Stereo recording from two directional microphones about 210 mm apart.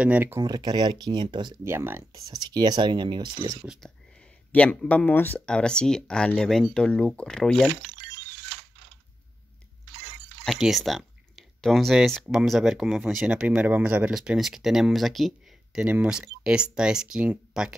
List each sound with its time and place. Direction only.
0.0 s speech: 10° right (ahead or behind)
3.6 s speech: 5° right (ahead or behind)
10.4 s speech: centre (ahead or behind)